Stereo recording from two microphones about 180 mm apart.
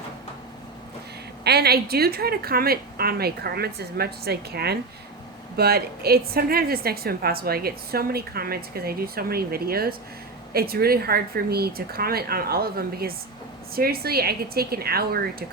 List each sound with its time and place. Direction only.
1.5 s a woman's voice: 60° right (ahead or behind)